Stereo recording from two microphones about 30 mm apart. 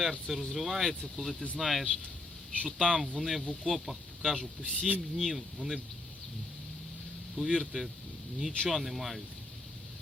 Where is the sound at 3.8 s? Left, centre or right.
Centre.